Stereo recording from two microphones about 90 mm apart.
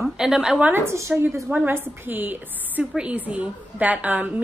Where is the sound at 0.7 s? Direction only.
30° right (ahead or behind).